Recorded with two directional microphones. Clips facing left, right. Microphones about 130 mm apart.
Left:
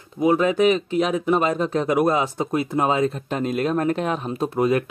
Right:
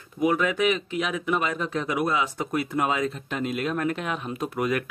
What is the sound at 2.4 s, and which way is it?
Speech, 25° left (ahead or behind).